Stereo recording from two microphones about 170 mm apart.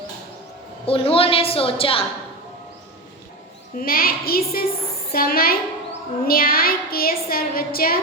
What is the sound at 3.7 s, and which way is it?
A woman's voice, 60° left (ahead or behind).